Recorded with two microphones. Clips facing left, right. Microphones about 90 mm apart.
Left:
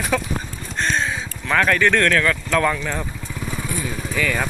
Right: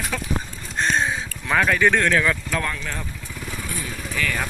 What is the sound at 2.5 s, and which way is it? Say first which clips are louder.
Speech: left 7 dB; 90° left.